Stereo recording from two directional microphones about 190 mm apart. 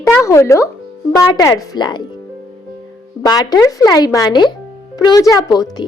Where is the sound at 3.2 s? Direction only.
20° left (ahead or behind).